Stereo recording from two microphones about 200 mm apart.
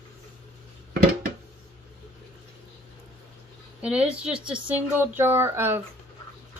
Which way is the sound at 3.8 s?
5° right (ahead or behind).